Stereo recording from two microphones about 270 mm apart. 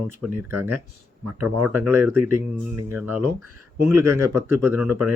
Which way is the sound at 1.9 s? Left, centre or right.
Centre.